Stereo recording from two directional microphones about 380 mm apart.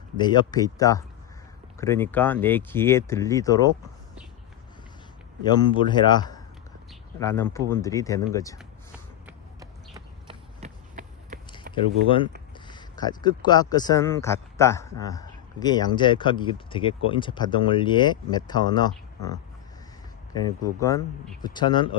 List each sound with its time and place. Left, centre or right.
0.2 s speech: centre
5.4 s speech: centre
9.2 s run: centre
11.7 s a sound: right
12.5 s speech: centre
20.7 s speech: centre